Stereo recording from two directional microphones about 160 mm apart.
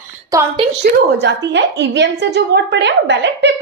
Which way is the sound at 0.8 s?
90° right.